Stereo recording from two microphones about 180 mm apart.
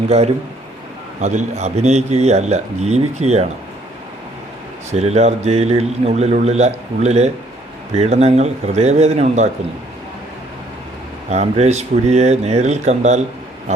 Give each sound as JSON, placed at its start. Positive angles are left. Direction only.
{"t": 1.2, "sound": "a man's voice", "side_deg": -40}
{"t": 4.9, "sound": "a man's voice", "side_deg": -35}
{"t": 11.3, "sound": "a man's voice", "side_deg": -40}